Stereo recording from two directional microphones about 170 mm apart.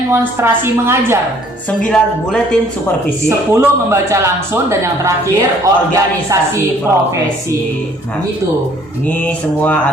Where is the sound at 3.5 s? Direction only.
15° right (ahead or behind).